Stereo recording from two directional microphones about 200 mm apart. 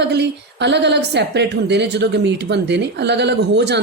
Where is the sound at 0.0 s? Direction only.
60° right (ahead or behind).